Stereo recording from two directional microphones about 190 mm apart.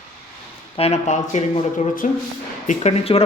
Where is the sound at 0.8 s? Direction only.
35° left (ahead or behind).